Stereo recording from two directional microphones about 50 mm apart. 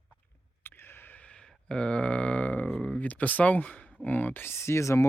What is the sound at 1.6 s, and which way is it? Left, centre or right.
Grunt, centre.